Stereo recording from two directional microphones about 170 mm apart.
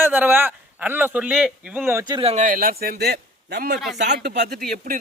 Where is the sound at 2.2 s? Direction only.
35° right (ahead or behind).